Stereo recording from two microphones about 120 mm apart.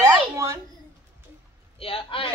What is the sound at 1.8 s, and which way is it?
Speech, 50° left (ahead or behind).